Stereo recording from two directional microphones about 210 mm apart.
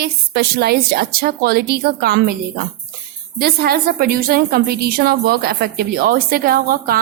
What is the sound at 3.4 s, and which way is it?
A woman's voice, 45° right (ahead or behind).